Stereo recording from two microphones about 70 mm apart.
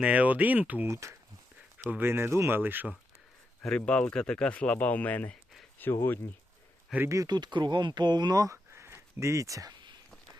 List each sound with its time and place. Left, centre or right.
0.0 s speech: centre
0.9 s speech: right
1.8 s speech: right
3.8 s speech: centre
6.9 s speech: centre
7.3 s speech: right
8.4 s a sound: right